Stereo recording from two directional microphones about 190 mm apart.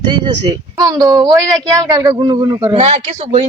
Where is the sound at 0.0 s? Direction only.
20° right (ahead or behind).